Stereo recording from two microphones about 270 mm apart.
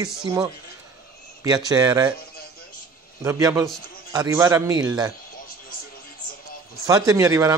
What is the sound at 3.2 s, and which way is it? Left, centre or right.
Speech, centre.